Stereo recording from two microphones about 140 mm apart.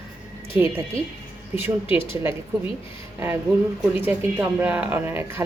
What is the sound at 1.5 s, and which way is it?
Speech, 15° right (ahead or behind).